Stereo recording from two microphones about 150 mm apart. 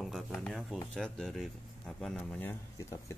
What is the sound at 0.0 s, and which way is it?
Speech, 5° left (ahead or behind).